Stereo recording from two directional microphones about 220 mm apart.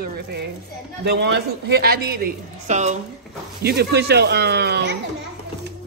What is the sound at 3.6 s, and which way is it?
Speech, 50° right (ahead or behind).